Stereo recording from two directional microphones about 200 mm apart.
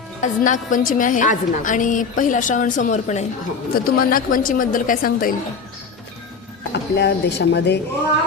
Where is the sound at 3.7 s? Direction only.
45° left (ahead or behind).